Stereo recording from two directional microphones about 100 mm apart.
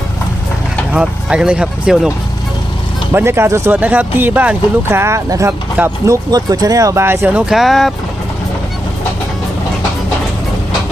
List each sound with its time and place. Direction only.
0.9 s speech: 10° right (ahead or behind)
3.1 s speech: 25° right (ahead or behind)
5.5 s speech: 20° right (ahead or behind)
6.1 s speech: 40° right (ahead or behind); by 7.3 s 25° right (ahead or behind)
7.3 s speech: 5° right (ahead or behind)